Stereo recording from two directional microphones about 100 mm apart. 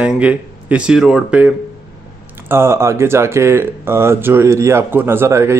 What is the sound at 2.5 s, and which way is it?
Speech, 25° right (ahead or behind).